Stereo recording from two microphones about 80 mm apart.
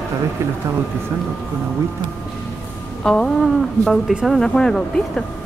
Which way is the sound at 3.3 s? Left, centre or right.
Centre.